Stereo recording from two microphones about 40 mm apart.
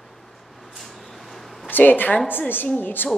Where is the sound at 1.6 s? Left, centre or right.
Left.